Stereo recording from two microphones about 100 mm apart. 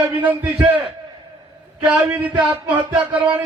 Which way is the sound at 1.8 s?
15° right (ahead or behind).